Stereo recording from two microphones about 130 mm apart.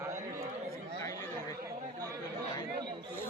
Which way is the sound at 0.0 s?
20° right (ahead or behind).